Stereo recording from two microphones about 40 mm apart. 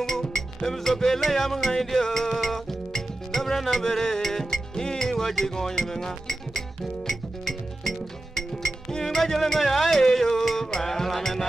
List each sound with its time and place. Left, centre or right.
0.0 s music: centre